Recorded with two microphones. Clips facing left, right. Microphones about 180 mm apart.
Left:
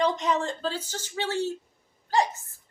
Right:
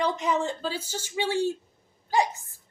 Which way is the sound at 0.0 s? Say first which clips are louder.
Left 1 dB; 10° right (ahead or behind).